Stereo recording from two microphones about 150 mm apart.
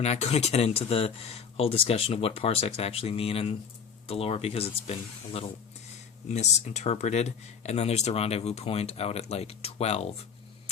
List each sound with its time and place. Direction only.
0.0 s speech: 45° left (ahead or behind)